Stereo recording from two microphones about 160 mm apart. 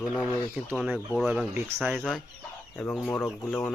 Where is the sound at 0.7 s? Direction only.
5° right (ahead or behind).